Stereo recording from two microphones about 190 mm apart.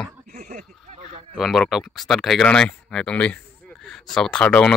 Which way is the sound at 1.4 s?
Centre (ahead or behind).